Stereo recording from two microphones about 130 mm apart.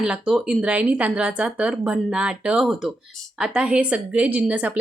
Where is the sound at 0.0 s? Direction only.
5° right (ahead or behind).